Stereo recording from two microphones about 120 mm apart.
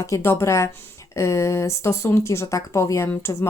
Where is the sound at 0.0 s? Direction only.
20° left (ahead or behind).